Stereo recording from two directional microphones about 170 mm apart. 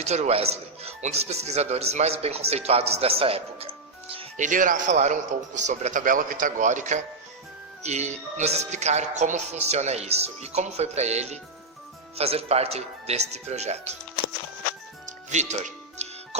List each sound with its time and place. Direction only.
0.0 s a man's voice: 40° right (ahead or behind)
4.4 s a man's voice: 50° right (ahead or behind)
15.3 s music: 45° right (ahead or behind)